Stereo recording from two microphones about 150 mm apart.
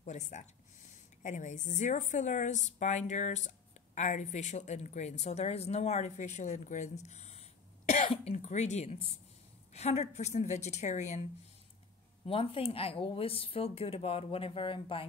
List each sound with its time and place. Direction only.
0.0 s a woman's voice: 50° left (ahead or behind)
12.3 s speech: 40° left (ahead or behind)